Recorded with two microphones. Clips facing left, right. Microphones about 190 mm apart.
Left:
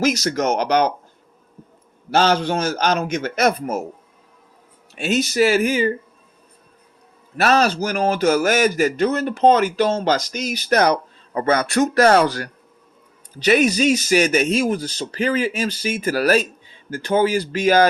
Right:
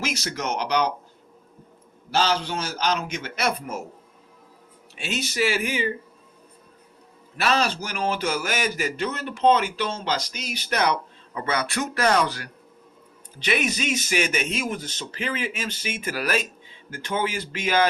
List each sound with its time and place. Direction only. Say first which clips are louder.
0.0 s a man's voice: left 10 dB; 40° left (ahead or behind)
2.0 s a man's voice: left 6 dB; 55° left (ahead or behind)
4.9 s a man's voice: left 8 dB; 45° left (ahead or behind)
7.3 s a man's voice: left 6 dB; 45° left (ahead or behind)